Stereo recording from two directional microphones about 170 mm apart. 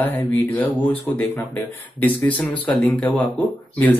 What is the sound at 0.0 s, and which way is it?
Speech, 10° left (ahead or behind).